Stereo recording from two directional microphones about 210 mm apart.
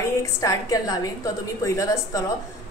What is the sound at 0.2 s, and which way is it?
A woman's voice, 15° left (ahead or behind).